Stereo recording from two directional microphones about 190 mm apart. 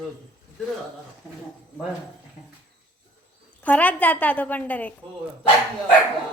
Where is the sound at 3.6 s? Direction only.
10° left (ahead or behind).